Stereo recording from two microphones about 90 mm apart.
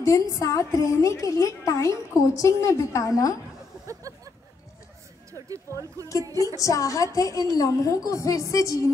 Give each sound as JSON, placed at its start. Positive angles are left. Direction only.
{"t": 0.0, "sound": "a woman's voice", "side_deg": 35}
{"t": 3.8, "sound": "a sound", "side_deg": -40}
{"t": 5.7, "sound": "speech", "side_deg": -35}
{"t": 6.6, "sound": "a woman's voice", "side_deg": 35}